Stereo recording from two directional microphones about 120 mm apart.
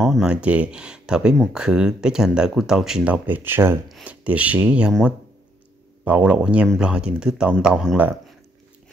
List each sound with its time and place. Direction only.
0.0 s speech: centre (ahead or behind)
6.0 s speech: 10° right (ahead or behind)